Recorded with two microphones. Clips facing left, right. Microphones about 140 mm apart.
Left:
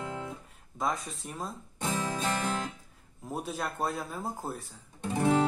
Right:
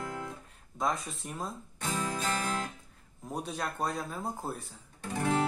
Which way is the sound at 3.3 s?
5° left (ahead or behind).